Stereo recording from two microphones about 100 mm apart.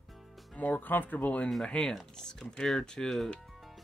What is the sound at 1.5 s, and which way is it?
Speech, 5° left (ahead or behind).